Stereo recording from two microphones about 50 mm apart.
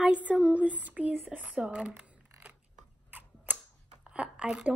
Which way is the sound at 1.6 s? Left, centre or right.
Right.